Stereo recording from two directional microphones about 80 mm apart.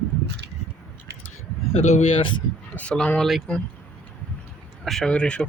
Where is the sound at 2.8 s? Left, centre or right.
Centre.